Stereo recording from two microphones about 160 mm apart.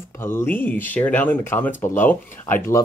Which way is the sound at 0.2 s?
15° left (ahead or behind).